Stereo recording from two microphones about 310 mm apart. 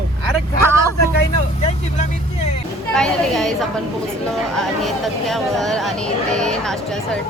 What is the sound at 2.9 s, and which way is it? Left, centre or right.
Speech, centre.